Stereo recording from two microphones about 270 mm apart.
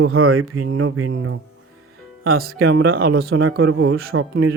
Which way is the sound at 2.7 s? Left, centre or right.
Right.